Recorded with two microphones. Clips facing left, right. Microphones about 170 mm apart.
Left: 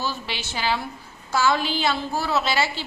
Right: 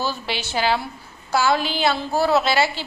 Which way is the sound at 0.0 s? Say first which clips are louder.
Right 4 dB; 35° right (ahead or behind).